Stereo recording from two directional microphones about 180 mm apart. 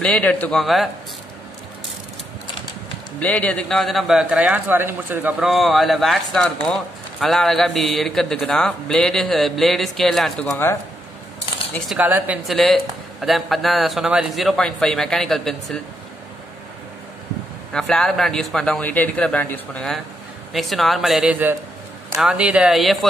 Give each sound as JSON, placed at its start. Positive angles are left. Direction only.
{"t": 0.0, "sound": "a man's voice", "side_deg": 5}
{"t": 3.2, "sound": "a man's voice", "side_deg": 10}
{"t": 10.5, "sound": "speech", "side_deg": 15}
{"t": 11.9, "sound": "a man's voice", "side_deg": -5}
{"t": 17.7, "sound": "a man's voice", "side_deg": 5}